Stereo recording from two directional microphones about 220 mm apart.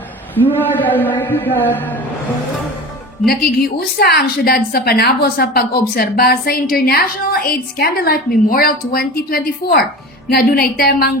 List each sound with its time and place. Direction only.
0.3 s a man's voice: 10° left (ahead or behind)
3.2 s a woman's voice: 45° left (ahead or behind)